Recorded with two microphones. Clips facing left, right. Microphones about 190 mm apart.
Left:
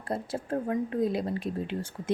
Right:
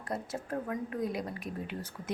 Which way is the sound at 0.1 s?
30° left (ahead or behind).